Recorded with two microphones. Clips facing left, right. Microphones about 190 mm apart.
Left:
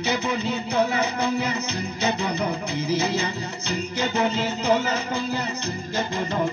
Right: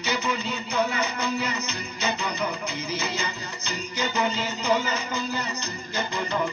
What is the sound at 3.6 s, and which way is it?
Music, 60° left (ahead or behind).